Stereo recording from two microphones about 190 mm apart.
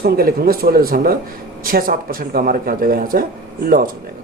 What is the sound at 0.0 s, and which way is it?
Speech, 50° right (ahead or behind).